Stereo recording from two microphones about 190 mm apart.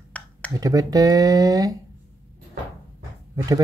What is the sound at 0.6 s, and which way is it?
Speech, 20° right (ahead or behind).